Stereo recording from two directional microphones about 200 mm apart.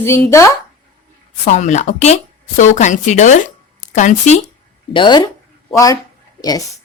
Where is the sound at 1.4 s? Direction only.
35° left (ahead or behind).